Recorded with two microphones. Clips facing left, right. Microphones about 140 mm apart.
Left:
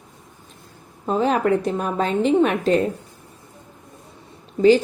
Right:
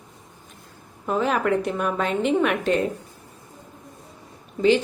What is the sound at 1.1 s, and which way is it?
A woman's voice, 30° left (ahead or behind).